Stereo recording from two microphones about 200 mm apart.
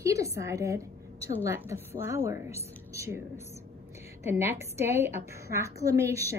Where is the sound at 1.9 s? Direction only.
10° right (ahead or behind).